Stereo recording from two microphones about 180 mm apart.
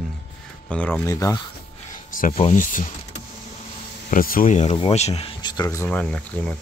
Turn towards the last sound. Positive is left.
turn(degrees=10)  # may be behind; listen again after turning